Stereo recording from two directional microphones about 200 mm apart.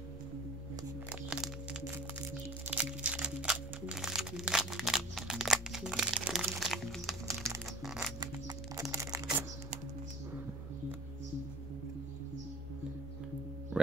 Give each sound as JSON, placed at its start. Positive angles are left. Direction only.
{"t": 1.3, "sound": "music", "side_deg": -5}
{"t": 6.7, "sound": "crumpling", "side_deg": 0}
{"t": 7.8, "sound": "music", "side_deg": 0}
{"t": 8.2, "sound": "music", "side_deg": -20}
{"t": 8.9, "sound": "a sound", "side_deg": -15}